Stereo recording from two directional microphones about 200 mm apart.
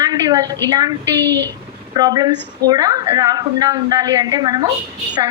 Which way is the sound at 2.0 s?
20° right (ahead or behind).